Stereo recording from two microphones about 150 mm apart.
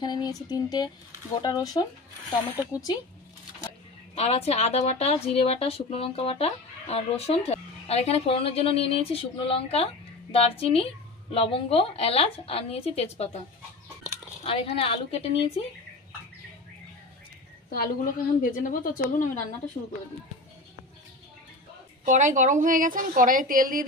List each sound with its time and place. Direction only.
0.0 s speech: 25° left (ahead or behind)
4.1 s speech: 40° left (ahead or behind)
14.4 s speech: 35° left (ahead or behind)
18.1 s speech: 65° left (ahead or behind)
22.0 s a woman's voice: 55° right (ahead or behind)